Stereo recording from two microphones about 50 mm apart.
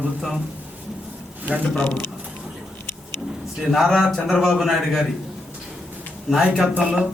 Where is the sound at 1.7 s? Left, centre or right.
Left.